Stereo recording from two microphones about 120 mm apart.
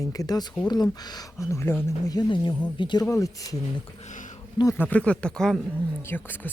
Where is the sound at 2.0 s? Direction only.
35° left (ahead or behind).